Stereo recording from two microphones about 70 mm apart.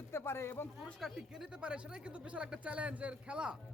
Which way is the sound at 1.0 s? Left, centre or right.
Centre.